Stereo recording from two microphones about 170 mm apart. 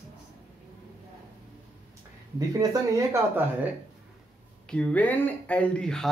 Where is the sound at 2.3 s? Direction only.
20° right (ahead or behind).